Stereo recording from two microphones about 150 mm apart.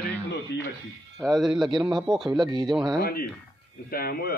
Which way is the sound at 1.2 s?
Centre (ahead or behind).